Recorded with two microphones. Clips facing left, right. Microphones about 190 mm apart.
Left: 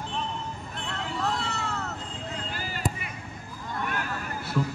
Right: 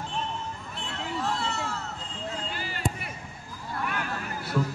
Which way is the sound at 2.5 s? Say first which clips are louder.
Even; 45° left (ahead or behind).